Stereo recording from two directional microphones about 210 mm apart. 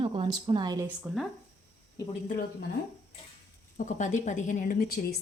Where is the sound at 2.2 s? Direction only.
40° left (ahead or behind).